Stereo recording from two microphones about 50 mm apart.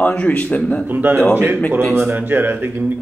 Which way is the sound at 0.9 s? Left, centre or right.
Right.